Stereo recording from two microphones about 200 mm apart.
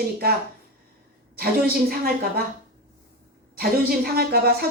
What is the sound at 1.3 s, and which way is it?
Speech, 50° right (ahead or behind).